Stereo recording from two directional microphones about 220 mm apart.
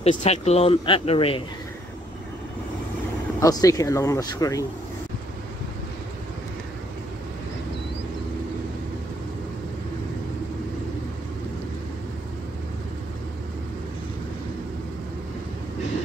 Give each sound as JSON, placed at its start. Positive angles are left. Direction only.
{"t": 0.0, "sound": "speech", "side_deg": 30}
{"t": 3.3, "sound": "speech", "side_deg": 15}